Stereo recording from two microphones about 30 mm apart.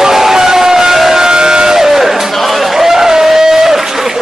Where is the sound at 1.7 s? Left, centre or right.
Centre.